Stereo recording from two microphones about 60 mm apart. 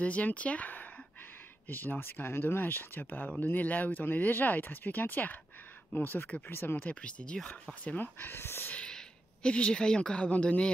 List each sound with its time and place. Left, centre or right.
0.0 s speech: left
6.9 s speech: centre
7.8 s speech: left
8.7 s a woman's voice: centre